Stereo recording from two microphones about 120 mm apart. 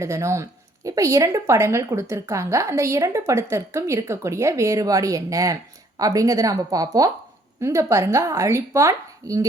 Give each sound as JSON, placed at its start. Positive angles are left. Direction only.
{"t": 0.0, "sound": "speech", "side_deg": -25}